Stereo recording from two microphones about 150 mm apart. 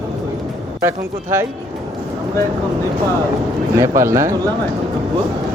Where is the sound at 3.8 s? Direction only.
20° right (ahead or behind).